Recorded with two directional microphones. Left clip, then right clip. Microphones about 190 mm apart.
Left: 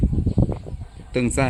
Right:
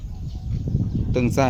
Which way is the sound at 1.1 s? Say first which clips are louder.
Left 1 dB; 5° left (ahead or behind).